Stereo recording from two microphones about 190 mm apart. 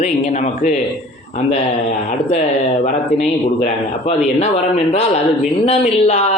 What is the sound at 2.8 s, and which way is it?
A man's voice, 35° left (ahead or behind).